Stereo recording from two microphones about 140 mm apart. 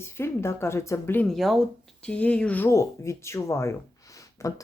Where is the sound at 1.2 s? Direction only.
Centre (ahead or behind).